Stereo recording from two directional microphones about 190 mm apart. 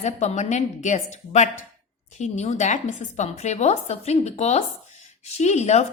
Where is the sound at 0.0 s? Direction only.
35° left (ahead or behind).